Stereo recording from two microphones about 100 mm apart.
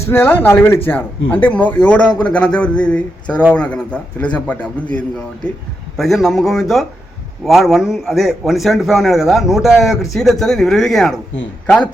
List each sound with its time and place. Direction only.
0.1 s a man's voice: 20° left (ahead or behind)
6.0 s a man's voice: centre (ahead or behind)